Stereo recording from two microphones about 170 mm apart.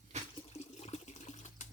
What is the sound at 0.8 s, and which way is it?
Water, 40° left (ahead or behind).